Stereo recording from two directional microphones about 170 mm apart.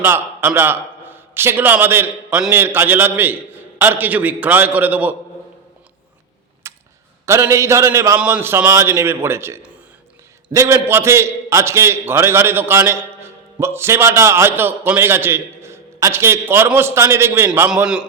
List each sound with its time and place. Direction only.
0.0 s a man's voice: 15° right (ahead or behind)
6.6 s a sound: 15° right (ahead or behind)
7.3 s a man's voice: 15° right (ahead or behind)